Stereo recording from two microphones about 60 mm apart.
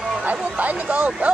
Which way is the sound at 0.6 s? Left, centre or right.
Right.